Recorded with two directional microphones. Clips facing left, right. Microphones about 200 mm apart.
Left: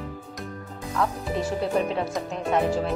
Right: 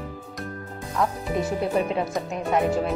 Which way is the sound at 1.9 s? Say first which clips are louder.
Right 1 dB; 10° right (ahead or behind).